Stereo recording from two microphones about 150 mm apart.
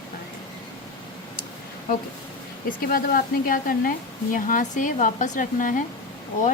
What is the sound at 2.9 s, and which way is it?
Speech, 70° left (ahead or behind).